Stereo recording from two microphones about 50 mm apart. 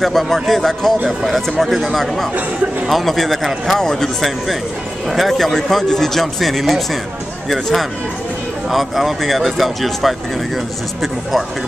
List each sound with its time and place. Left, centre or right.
0.0 s speech: centre
5.1 s speech: centre